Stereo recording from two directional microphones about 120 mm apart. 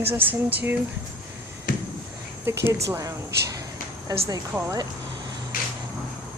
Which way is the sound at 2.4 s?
20° right (ahead or behind).